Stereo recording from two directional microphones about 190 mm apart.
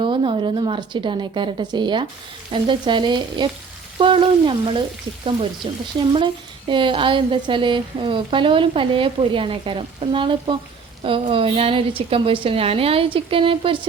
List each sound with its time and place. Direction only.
0.0 s speech: 25° right (ahead or behind)